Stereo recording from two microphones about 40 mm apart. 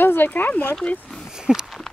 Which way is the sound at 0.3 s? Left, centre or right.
Left.